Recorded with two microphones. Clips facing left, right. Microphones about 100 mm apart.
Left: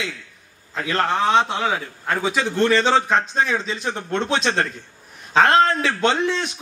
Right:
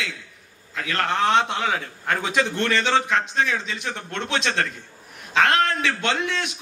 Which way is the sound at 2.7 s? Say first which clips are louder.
Left 2 dB; 30° left (ahead or behind).